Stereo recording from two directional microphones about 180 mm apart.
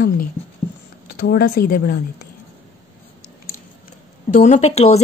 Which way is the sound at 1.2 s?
65° left (ahead or behind).